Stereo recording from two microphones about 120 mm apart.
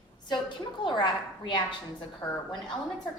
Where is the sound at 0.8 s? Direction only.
40° left (ahead or behind).